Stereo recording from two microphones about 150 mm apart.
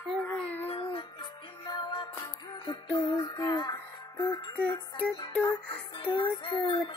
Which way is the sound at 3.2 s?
30° left (ahead or behind).